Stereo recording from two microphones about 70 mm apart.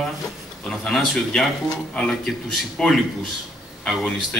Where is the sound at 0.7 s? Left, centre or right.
Centre.